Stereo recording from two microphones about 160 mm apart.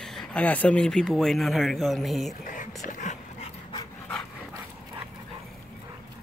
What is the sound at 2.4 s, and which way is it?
Dog, 55° left (ahead or behind).